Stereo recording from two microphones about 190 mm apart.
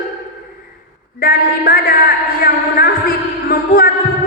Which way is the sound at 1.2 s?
50° left (ahead or behind).